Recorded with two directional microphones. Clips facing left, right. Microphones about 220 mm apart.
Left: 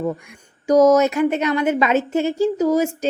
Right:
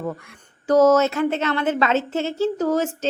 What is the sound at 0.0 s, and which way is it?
A woman's voice, 10° left (ahead or behind).